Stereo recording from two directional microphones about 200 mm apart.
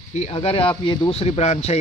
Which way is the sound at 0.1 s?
35° left (ahead or behind).